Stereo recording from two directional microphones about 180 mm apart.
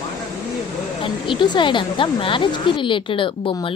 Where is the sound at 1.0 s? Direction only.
25° left (ahead or behind).